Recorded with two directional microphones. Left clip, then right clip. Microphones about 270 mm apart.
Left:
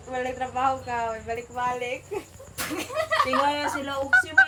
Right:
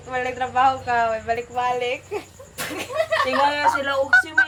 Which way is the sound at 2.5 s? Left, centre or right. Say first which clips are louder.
Right 4 dB; right.